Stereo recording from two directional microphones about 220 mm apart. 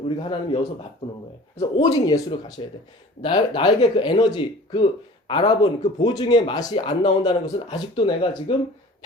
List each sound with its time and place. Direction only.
0.2 s a man's voice: 20° left (ahead or behind)